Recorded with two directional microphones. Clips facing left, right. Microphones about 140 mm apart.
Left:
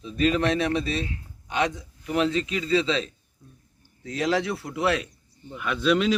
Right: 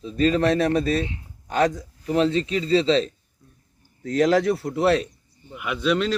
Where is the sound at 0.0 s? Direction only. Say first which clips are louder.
Right 3 dB; 35° right (ahead or behind).